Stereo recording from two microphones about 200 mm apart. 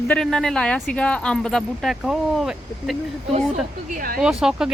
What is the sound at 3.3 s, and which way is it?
Speech, 40° right (ahead or behind).